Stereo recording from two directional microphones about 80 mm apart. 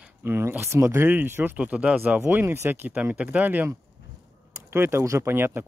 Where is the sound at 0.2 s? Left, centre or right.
Right.